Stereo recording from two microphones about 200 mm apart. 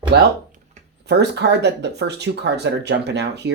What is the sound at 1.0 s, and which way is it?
Speech, 55° right (ahead or behind).